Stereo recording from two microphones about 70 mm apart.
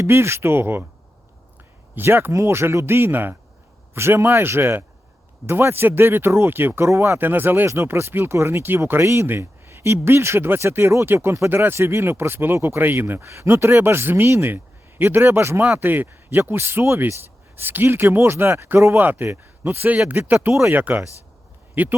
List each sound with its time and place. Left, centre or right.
0.0 s speech: right
2.0 s speech: right
6.8 s speech: right
7.2 s speech: right
7.7 s speech: right
18.9 s speech: right
19.3 s speech: right
20.1 s speech: right